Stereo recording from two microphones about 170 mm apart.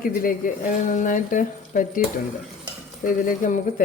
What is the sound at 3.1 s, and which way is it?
Speech, 50° left (ahead or behind).